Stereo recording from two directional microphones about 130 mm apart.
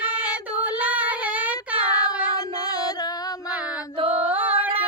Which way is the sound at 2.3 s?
30° left (ahead or behind).